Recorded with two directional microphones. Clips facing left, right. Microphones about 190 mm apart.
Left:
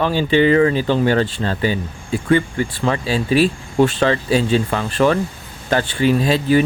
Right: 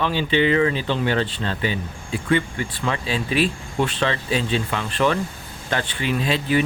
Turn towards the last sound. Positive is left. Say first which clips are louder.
# left 6 dB
turn(degrees=40)  # may be behind; listen again after turning